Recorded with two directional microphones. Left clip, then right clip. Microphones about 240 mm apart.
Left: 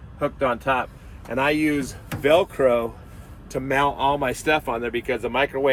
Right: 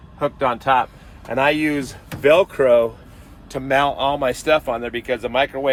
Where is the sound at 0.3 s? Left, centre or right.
Right.